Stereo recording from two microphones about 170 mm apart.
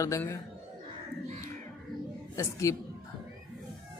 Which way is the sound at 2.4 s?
20° left (ahead or behind).